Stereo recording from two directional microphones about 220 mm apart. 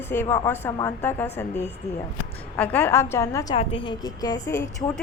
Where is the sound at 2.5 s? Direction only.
10° left (ahead or behind).